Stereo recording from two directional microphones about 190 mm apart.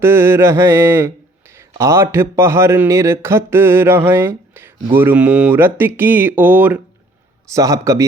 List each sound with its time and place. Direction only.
0.0 s speech: 10° right (ahead or behind)